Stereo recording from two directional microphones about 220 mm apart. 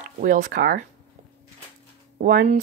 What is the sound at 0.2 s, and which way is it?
Speech, 40° right (ahead or behind).